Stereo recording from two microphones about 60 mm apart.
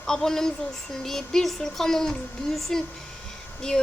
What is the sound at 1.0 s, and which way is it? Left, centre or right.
A woman's voice, centre.